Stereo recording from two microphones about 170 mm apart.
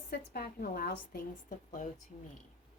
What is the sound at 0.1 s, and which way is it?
A woman's voice, 65° left (ahead or behind).